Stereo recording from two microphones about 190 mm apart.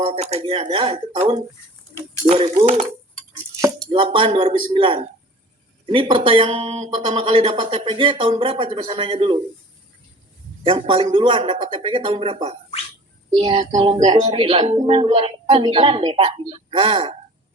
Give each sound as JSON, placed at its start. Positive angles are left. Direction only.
{"t": 0.0, "sound": "speech", "side_deg": -30}
{"t": 3.9, "sound": "speech", "side_deg": -25}
{"t": 10.6, "sound": "speech", "side_deg": -30}